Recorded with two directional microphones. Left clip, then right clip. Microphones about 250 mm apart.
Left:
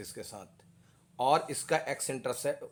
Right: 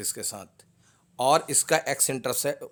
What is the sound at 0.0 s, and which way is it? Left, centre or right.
Speech, right.